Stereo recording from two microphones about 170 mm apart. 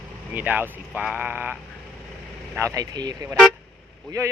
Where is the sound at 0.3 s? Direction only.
10° right (ahead or behind).